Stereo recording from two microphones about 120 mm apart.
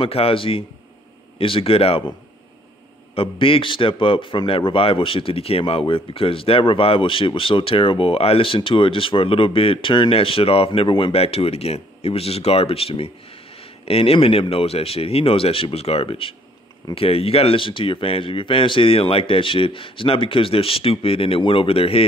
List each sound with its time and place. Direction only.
0.0 s a man's voice: 50° left (ahead or behind)
3.2 s a man's voice: 50° left (ahead or behind)